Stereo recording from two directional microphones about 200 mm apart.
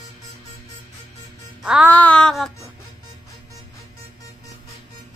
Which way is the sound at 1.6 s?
5° right (ahead or behind).